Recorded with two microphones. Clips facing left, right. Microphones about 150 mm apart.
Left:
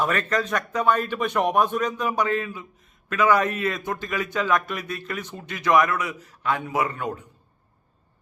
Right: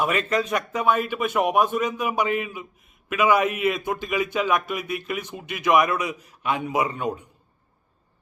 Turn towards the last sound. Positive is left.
turn(degrees=-15)  # may be behind; listen again after turning